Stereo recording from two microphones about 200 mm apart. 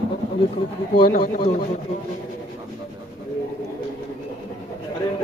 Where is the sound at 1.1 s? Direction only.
45° left (ahead or behind).